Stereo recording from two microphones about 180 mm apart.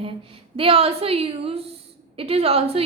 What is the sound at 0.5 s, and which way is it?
A woman's voice, 30° right (ahead or behind).